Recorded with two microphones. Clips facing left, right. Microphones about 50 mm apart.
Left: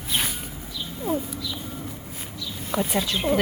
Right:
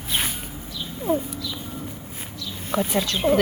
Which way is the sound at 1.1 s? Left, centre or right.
Right.